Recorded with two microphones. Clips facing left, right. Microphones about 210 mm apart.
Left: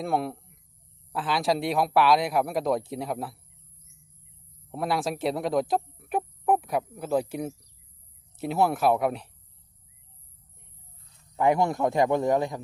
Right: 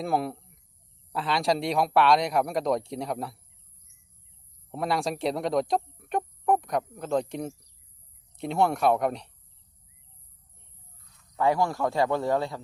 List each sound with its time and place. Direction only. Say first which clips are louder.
0.0 s a man's voice: even; centre (ahead or behind)
4.7 s a man's voice: even; centre (ahead or behind)
11.3 s a man's voice: left 2 dB; 20° left (ahead or behind)